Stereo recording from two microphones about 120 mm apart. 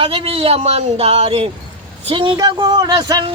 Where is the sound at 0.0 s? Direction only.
50° right (ahead or behind).